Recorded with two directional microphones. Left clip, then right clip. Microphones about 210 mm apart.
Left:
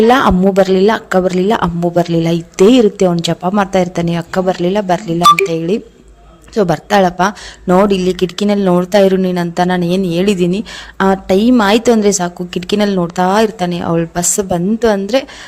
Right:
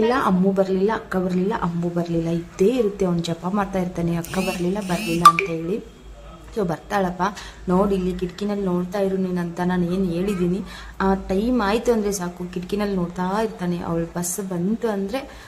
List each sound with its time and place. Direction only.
0.1 s speech: 40° left (ahead or behind)